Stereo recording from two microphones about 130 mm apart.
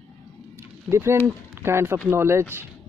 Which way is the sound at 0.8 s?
20° right (ahead or behind).